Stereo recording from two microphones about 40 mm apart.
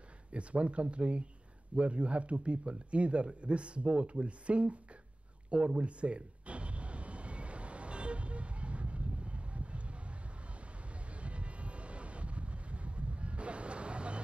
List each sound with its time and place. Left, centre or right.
0.3 s speech: right
5.8 s a sound: right
11.1 s vehicle: right